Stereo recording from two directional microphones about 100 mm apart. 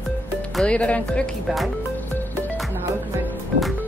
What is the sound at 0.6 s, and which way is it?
Speech, 10° left (ahead or behind).